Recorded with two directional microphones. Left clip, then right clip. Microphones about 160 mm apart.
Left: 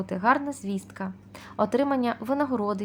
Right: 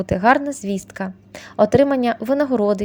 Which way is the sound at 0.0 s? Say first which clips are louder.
Right 8 dB; 35° right (ahead or behind).